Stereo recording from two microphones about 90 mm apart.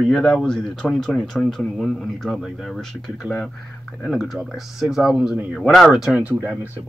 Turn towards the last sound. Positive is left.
turn(degrees=-15)  # may be behind; listen again after turning